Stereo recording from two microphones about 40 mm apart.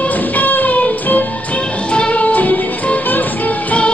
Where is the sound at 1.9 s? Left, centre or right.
Left.